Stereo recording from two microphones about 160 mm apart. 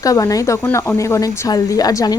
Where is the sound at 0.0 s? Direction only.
20° left (ahead or behind).